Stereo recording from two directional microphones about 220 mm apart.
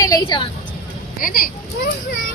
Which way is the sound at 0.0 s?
20° left (ahead or behind).